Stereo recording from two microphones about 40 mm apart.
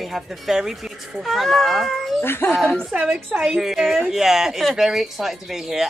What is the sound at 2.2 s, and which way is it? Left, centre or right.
Speech, left.